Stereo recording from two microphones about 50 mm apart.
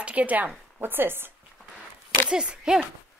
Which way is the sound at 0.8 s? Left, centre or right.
Right.